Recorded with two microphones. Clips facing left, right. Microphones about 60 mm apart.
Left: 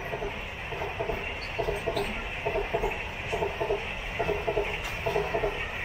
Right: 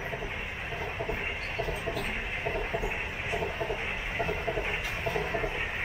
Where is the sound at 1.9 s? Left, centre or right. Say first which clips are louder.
Left 2 dB; right.